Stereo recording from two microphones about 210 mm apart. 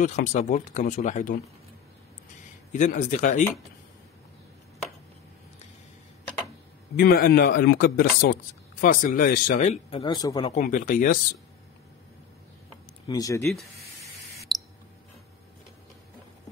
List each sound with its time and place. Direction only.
0.0 s speech: 35° left (ahead or behind)
2.7 s speech: 35° left (ahead or behind)
7.0 s speech: 45° left (ahead or behind); by 10.5 s 20° left (ahead or behind)
10.5 s speech: 35° left (ahead or behind)
13.1 s speech: 15° left (ahead or behind)
13.5 s speech: centre (ahead or behind)
14.5 s a sound: centre (ahead or behind)